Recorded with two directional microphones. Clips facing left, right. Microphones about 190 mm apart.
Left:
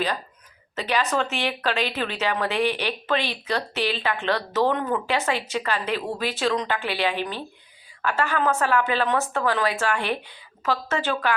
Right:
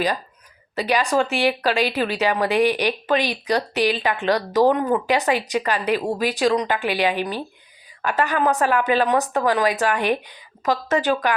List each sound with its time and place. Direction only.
0.8 s speech: 15° right (ahead or behind)